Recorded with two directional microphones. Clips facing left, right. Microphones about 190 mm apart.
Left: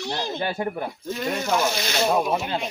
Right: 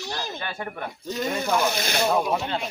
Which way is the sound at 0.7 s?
5° left (ahead or behind).